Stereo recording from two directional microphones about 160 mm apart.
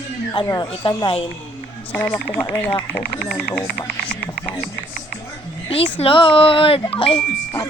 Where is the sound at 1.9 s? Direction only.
10° left (ahead or behind).